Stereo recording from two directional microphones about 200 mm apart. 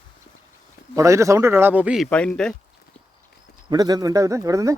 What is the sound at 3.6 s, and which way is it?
Speech, 20° right (ahead or behind).